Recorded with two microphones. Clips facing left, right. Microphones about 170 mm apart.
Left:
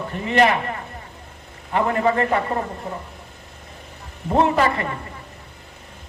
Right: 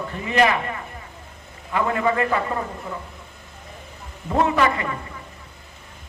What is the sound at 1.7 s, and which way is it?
Speech, 35° left (ahead or behind).